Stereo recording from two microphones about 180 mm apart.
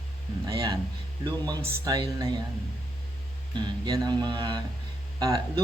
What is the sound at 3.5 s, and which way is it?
Speech, 25° right (ahead or behind).